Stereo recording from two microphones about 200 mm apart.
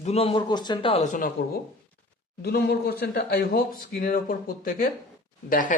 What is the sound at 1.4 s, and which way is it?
Speech, 50° left (ahead or behind).